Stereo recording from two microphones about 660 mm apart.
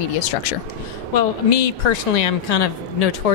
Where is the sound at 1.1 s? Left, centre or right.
Left.